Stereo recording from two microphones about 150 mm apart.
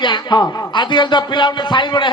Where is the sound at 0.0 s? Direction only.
30° left (ahead or behind).